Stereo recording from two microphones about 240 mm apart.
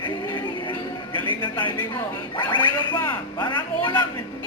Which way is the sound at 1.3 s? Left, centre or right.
Centre.